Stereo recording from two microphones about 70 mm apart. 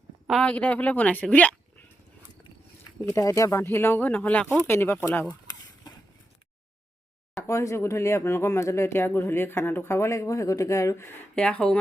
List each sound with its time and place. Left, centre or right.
0.4 s speech: centre
3.1 s speech: left
4.6 s speech: left
7.4 s speech: left
11.3 s speech: centre